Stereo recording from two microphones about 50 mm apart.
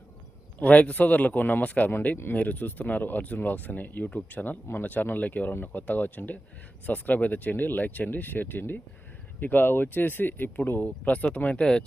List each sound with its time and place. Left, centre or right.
0.6 s speech: left
10.7 s speech: left
11.6 s speech: centre